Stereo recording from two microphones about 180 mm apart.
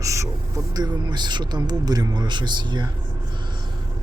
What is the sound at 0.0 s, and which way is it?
Speech, 15° right (ahead or behind).